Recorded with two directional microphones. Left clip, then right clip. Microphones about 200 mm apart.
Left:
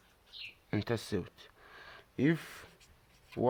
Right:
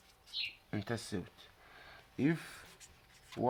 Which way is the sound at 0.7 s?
40° left (ahead or behind).